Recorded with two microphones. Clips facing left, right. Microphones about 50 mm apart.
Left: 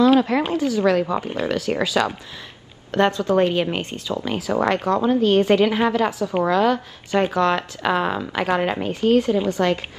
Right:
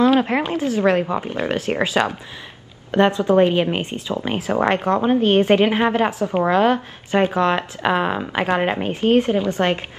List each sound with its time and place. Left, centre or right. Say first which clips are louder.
0.0 s speech: even; right
1.0 s speech: right 1 dB; right
2.9 s speech: right 3 dB; right